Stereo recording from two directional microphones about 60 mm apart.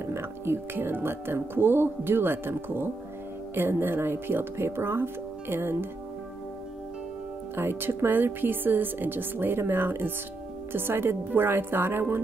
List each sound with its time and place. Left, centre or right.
0.0 s speech: right
7.5 s speech: right